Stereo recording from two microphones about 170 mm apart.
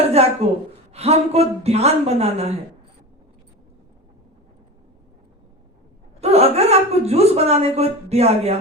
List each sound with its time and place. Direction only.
0.1 s a sound: 40° right (ahead or behind)
0.9 s speech: 40° right (ahead or behind)
6.1 s speech: 35° right (ahead or behind)